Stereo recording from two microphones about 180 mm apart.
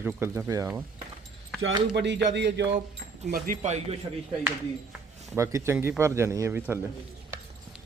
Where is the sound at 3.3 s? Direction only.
45° right (ahead or behind).